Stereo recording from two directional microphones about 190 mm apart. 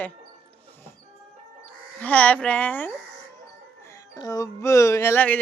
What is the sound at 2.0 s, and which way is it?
Speech, 10° left (ahead or behind).